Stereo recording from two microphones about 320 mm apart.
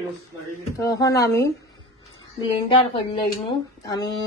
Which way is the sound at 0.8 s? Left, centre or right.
Centre.